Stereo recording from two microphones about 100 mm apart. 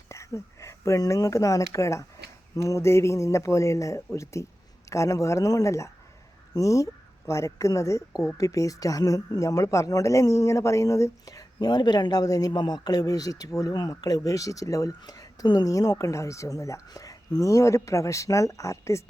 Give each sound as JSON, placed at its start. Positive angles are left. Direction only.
{"t": 0.1, "sound": "speech", "side_deg": 30}